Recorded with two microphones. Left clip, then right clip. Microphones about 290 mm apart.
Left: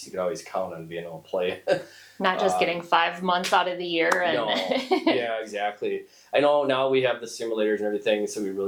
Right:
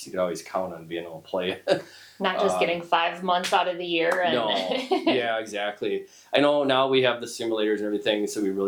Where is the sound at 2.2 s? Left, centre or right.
Centre.